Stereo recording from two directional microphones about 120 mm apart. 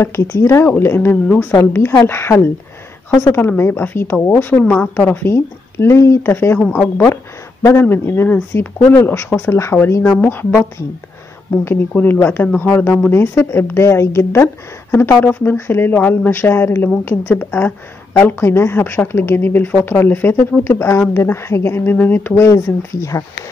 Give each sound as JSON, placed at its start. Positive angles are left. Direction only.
{"t": 0.0, "sound": "a woman's voice", "side_deg": 20}
{"t": 6.6, "sound": "a woman's voice", "side_deg": 10}
{"t": 7.6, "sound": "a woman's voice", "side_deg": 20}
{"t": 11.5, "sound": "a woman's voice", "side_deg": 15}